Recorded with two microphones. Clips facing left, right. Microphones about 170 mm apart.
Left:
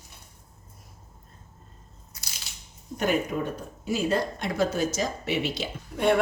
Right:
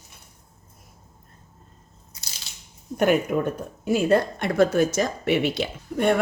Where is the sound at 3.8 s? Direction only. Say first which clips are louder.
Right 6 dB; 55° right (ahead or behind).